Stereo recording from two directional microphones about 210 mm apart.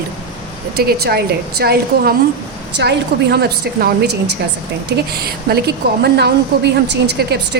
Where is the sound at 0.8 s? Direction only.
50° right (ahead or behind).